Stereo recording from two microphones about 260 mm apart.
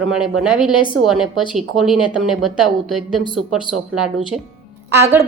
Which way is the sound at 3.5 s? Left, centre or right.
Centre.